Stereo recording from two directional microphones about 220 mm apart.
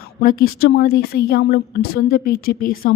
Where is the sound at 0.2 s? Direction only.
40° left (ahead or behind).